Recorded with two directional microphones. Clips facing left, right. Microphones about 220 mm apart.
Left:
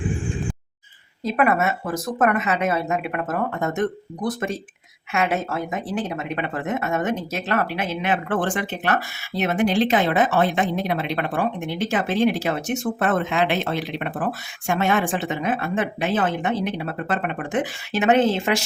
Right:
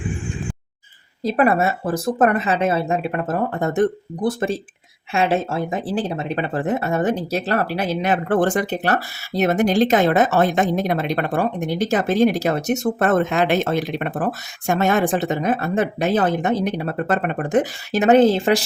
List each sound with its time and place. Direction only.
1.2 s speech: 35° right (ahead or behind)